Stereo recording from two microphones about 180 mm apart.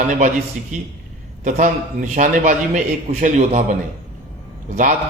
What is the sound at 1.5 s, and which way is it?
A man's voice, 45° right (ahead or behind).